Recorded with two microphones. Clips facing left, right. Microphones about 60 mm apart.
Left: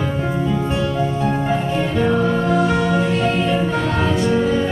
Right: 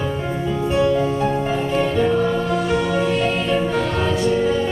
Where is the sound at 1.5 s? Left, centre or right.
Left.